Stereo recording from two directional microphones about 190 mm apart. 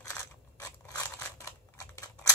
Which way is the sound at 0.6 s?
15° left (ahead or behind).